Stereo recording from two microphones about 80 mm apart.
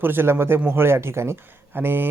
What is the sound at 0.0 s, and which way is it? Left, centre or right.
Speech, right.